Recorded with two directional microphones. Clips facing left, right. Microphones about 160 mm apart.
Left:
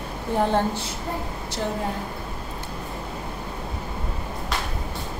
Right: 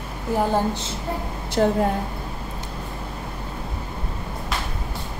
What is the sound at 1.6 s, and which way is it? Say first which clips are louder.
Speech: right 9 dB; 65° right (ahead or behind).